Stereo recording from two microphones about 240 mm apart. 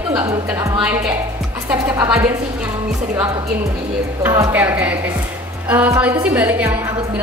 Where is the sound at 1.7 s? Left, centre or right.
Centre.